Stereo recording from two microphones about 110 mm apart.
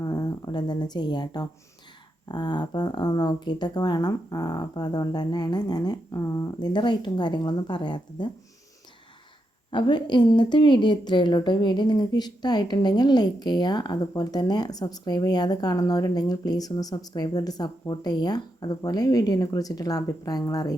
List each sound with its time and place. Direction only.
0.0 s a woman's voice: 35° left (ahead or behind)
6.6 s a woman's voice: 45° left (ahead or behind)
9.7 s speech: 45° left (ahead or behind)